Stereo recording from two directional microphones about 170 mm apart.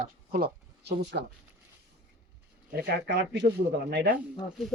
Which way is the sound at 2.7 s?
65° right (ahead or behind).